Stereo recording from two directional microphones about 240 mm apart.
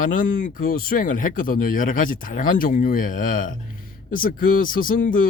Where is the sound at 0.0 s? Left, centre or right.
Left.